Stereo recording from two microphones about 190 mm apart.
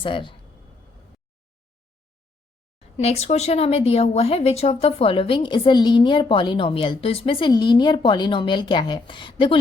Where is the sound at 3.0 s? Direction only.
35° left (ahead or behind).